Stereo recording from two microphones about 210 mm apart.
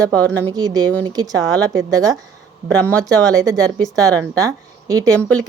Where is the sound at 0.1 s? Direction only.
5° left (ahead or behind).